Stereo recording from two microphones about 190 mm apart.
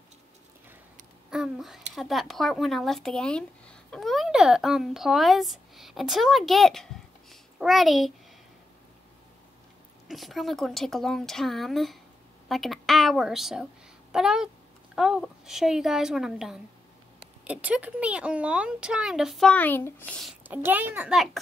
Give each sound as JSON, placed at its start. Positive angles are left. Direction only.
{"t": 1.3, "sound": "a child's voice", "side_deg": 0}
{"t": 10.0, "sound": "a woman's voice", "side_deg": 0}
{"t": 20.4, "sound": "a child's voice", "side_deg": -10}